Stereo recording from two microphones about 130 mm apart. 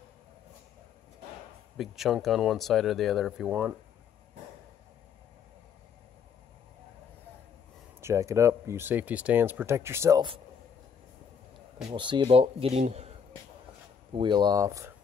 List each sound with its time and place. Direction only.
1.8 s speech: centre (ahead or behind)
8.0 s speech: 20° right (ahead or behind)
11.9 s speech: 35° right (ahead or behind)
14.1 s speech: 35° right (ahead or behind)